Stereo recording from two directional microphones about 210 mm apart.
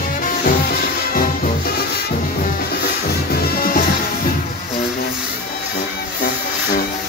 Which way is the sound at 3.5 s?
45° left (ahead or behind).